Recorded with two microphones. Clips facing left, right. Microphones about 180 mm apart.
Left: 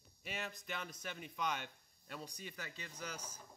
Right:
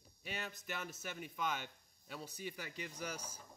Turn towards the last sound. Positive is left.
turn(degrees=-10)  # may be behind; listen again after turning